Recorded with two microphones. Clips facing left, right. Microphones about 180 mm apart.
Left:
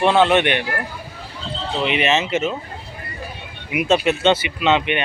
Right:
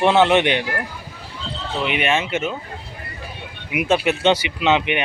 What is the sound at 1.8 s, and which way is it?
Speech, centre (ahead or behind).